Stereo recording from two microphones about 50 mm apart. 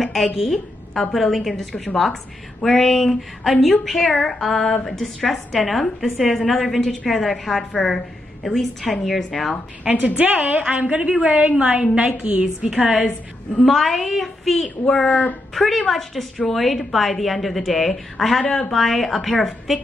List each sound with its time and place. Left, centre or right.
0.0 s a sound: centre
1.1 s a woman's voice: centre
10.0 s a woman's voice: right
13.7 s a woman's voice: centre
15.0 s speech: left
15.5 s a woman's voice: centre